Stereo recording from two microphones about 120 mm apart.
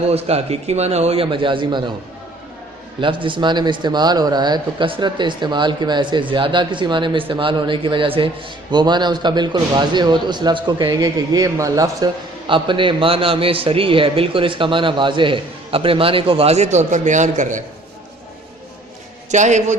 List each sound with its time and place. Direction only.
0.1 s a man's voice: 60° right (ahead or behind)
3.0 s a man's voice: 45° right (ahead or behind)
12.5 s a man's voice: 45° right (ahead or behind); by 17.6 s 90° right
19.3 s a man's voice: 80° right